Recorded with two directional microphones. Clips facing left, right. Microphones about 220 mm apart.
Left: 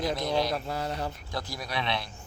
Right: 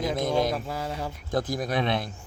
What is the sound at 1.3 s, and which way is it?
Speech, 50° right (ahead or behind).